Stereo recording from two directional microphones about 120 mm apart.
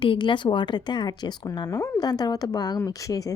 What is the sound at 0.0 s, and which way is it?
Speech, 45° left (ahead or behind).